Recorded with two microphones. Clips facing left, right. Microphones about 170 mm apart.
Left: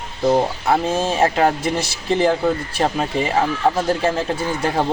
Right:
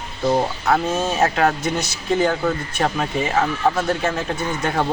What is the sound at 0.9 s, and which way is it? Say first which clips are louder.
Speech: left 2 dB; 30° left (ahead or behind).